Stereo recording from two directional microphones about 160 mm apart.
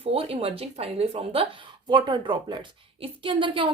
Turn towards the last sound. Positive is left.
turn(degrees=-30)  # may be behind; listen again after turning